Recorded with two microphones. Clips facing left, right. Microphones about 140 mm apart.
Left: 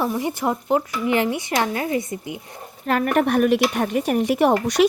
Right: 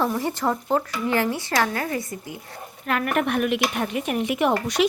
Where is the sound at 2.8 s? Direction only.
35° left (ahead or behind).